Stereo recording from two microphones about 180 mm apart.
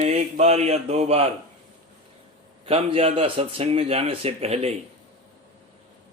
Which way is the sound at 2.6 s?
35° right (ahead or behind).